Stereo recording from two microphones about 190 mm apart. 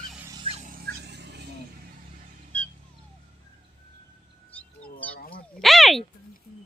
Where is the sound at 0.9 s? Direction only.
60° right (ahead or behind).